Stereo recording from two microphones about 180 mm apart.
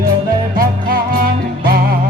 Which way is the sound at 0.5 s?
55° right (ahead or behind).